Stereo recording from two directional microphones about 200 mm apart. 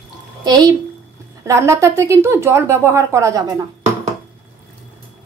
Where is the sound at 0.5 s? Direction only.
20° right (ahead or behind).